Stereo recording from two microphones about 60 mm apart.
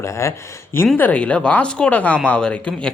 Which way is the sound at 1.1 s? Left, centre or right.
Centre.